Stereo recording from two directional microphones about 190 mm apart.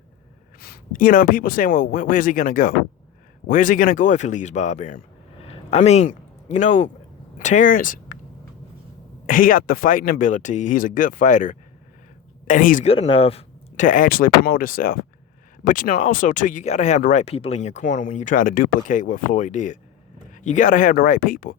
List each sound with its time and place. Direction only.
0.6 s speech: 50° left (ahead or behind)
9.2 s speech: 45° left (ahead or behind)
12.9 s speech: 30° left (ahead or behind); by 21.5 s 45° left (ahead or behind)